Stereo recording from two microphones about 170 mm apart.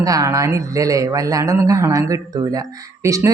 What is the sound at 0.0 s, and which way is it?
Speech, 20° right (ahead or behind).